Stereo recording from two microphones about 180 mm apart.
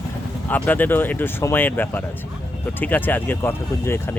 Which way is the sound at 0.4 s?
10° left (ahead or behind).